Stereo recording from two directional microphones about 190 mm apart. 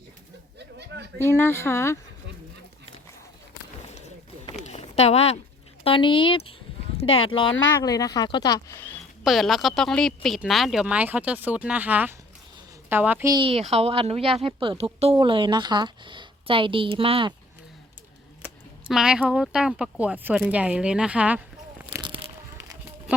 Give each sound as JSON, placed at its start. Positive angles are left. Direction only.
{"t": 1.2, "sound": "speech", "side_deg": 10}
{"t": 4.5, "sound": "a sound", "side_deg": 35}
{"t": 5.8, "sound": "speech", "side_deg": 25}
{"t": 9.2, "sound": "a woman's voice", "side_deg": 0}
{"t": 13.3, "sound": "a woman's voice", "side_deg": -30}
{"t": 18.9, "sound": "speech", "side_deg": -5}
{"t": 22.0, "sound": "a sound", "side_deg": -25}